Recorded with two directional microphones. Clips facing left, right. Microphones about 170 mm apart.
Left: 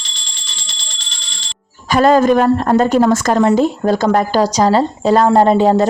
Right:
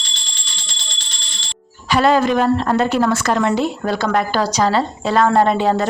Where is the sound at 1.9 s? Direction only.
45° left (ahead or behind).